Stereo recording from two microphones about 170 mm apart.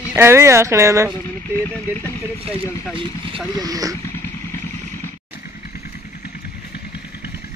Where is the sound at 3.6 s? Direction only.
20° right (ahead or behind).